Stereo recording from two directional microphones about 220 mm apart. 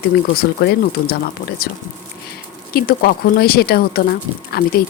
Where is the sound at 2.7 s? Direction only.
45° left (ahead or behind).